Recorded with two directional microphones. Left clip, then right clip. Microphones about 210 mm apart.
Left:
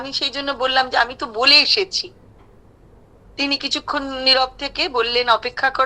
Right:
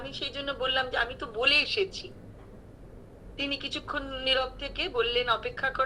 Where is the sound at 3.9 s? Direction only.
60° left (ahead or behind).